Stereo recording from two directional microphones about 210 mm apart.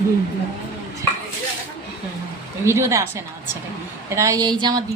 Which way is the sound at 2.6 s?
15° right (ahead or behind).